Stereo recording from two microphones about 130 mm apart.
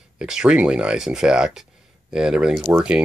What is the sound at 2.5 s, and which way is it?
Speech, 20° right (ahead or behind).